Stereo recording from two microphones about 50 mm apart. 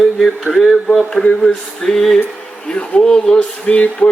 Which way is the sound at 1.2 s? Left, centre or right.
Left.